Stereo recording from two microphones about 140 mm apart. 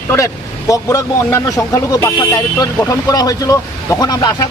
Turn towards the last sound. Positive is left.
turn(degrees=25)  # may be behind; listen again after turning